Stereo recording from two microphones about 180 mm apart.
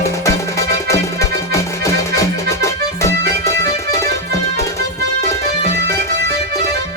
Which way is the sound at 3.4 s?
15° left (ahead or behind).